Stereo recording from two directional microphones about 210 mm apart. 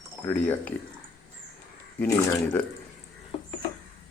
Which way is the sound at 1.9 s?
15° left (ahead or behind).